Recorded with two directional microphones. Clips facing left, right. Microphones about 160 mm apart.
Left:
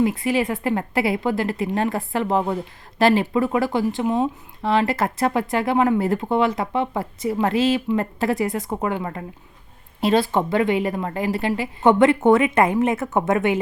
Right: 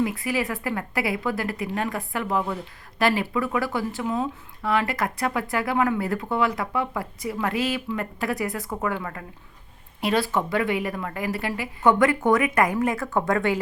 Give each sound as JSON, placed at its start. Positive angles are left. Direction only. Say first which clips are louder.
{"t": 0.0, "sound": "speech", "louder": "left 5 dB", "side_deg": 25}